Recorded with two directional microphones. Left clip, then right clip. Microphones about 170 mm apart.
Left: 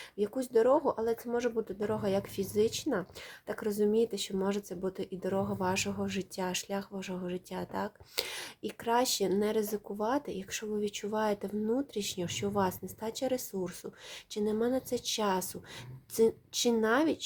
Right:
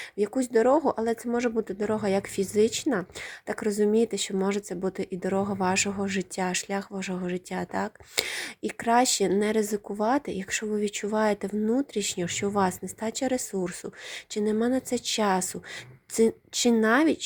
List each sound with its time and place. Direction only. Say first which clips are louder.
0.2 s speech: right 4 dB; 30° right (ahead or behind)